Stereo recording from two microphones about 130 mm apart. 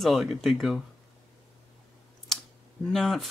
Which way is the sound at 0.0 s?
Centre (ahead or behind).